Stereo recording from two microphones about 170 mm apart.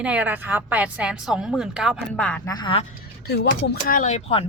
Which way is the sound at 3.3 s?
65° left (ahead or behind).